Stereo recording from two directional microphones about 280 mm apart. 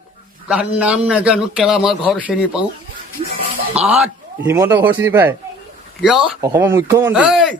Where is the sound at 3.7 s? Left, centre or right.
Centre.